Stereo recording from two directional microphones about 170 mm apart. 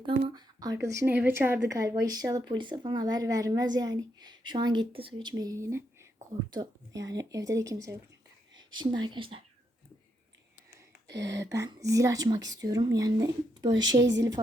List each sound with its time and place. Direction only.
0.0 s a woman's voice: 25° right (ahead or behind)
5.3 s speech: 20° right (ahead or behind)
9.0 s speech: 30° right (ahead or behind)
11.3 s speech: 20° right (ahead or behind)
14.0 s speech: 90° right